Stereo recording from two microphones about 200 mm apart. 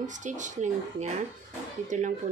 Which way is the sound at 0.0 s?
40° right (ahead or behind).